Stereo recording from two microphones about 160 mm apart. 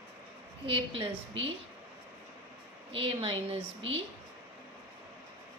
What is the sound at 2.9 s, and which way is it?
Speech, 35° right (ahead or behind).